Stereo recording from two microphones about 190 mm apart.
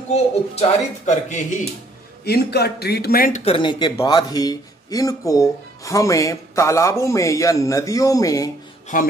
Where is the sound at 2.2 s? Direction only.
60° left (ahead or behind).